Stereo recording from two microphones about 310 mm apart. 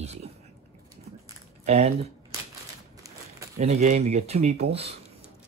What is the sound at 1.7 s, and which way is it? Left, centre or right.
Speech, centre.